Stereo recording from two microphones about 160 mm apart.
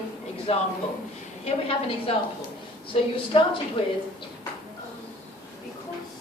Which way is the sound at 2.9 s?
40° left (ahead or behind).